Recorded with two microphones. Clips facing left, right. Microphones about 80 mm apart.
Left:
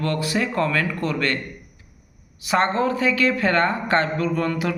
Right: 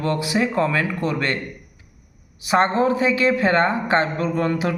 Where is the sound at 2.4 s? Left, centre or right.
Right.